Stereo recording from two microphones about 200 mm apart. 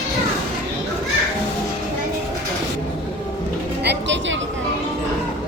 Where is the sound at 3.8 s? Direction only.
60° right (ahead or behind).